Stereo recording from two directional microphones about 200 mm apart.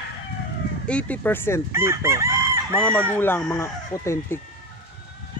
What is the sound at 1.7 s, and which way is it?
Speech, 15° right (ahead or behind).